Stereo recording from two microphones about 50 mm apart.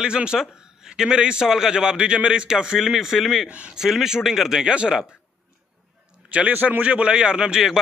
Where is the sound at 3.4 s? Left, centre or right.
Right.